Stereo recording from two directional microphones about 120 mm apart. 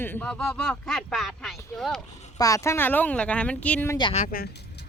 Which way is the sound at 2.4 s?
25° left (ahead or behind).